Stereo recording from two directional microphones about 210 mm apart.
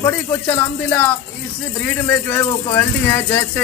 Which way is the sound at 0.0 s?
10° left (ahead or behind).